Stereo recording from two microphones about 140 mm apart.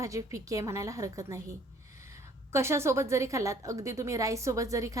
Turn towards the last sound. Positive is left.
turn(degrees=-25)  # may be behind; listen again after turning